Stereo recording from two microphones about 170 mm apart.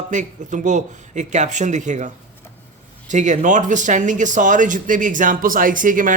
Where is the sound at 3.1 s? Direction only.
45° right (ahead or behind).